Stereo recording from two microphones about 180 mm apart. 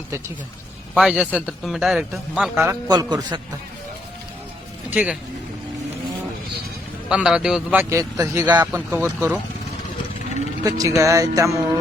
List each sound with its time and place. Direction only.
0.9 s a man's voice: 5° right (ahead or behind)
2.9 s a man's voice: 20° right (ahead or behind)
4.9 s a man's voice: 5° right (ahead or behind)
7.1 s a man's voice: 5° right (ahead or behind)
10.6 s a man's voice: 20° right (ahead or behind)